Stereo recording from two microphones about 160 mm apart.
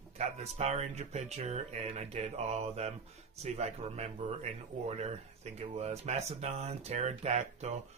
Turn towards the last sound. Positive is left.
turn(degrees=-40)  # may be behind; listen again after turning